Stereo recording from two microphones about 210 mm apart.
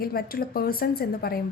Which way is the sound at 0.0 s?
45° left (ahead or behind).